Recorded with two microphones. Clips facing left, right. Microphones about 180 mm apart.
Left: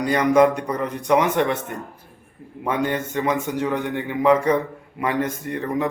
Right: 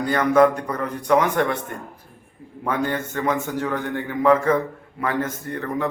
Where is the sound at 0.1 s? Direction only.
15° left (ahead or behind).